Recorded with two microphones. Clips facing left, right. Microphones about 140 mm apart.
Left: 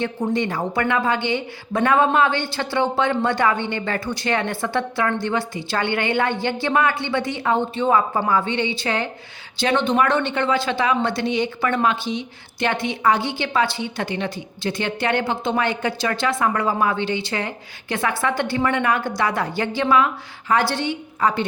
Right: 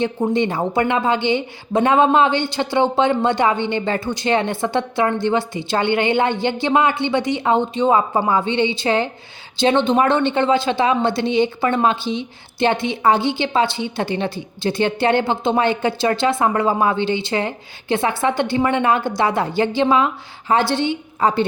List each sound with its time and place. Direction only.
0.0 s speech: 25° right (ahead or behind)